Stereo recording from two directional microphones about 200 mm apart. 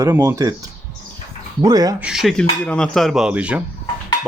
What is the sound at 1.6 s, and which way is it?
Speech, 20° right (ahead or behind).